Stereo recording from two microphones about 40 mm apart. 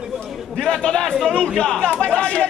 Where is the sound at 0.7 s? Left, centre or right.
Centre.